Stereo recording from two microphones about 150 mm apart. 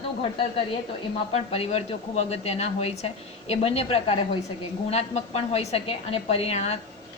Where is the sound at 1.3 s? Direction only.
40° left (ahead or behind).